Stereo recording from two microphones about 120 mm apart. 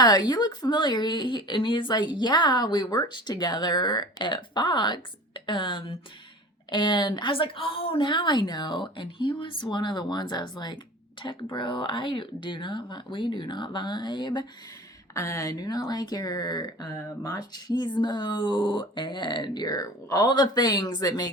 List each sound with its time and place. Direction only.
0.0 s speech: 35° left (ahead or behind)
15.1 s speech: 25° left (ahead or behind)